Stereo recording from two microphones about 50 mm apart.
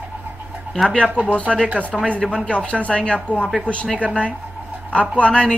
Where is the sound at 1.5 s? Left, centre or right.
Centre.